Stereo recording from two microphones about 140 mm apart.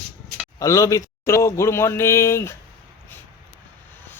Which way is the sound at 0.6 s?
20° left (ahead or behind).